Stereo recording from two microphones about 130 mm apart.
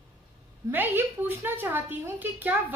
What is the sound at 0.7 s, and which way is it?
A woman's voice, 15° right (ahead or behind).